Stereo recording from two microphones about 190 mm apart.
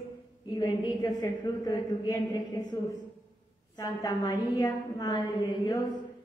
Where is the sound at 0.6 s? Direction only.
20° left (ahead or behind).